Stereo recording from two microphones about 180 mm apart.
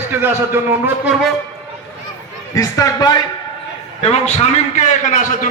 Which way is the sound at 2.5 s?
20° left (ahead or behind).